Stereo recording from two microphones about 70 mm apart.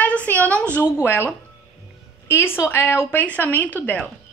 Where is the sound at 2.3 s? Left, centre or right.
Left.